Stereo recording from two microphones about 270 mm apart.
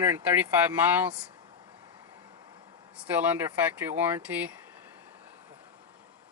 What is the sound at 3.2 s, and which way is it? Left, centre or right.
Speech, centre.